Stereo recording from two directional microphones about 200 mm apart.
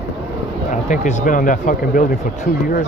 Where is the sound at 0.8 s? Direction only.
40° left (ahead or behind).